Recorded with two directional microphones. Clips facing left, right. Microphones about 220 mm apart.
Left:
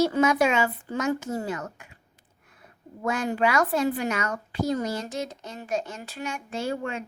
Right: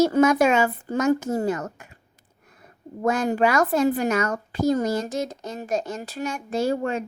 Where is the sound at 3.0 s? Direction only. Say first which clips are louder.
Right 4 dB; 40° right (ahead or behind).